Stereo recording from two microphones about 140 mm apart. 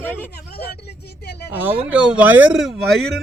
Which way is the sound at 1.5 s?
15° right (ahead or behind).